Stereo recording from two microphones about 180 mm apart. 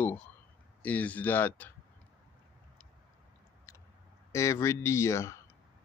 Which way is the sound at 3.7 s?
15° left (ahead or behind).